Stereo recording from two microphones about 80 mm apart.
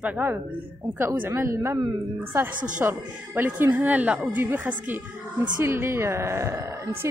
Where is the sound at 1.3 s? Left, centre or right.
Right.